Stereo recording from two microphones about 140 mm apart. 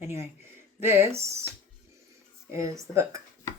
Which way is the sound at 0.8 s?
15° right (ahead or behind).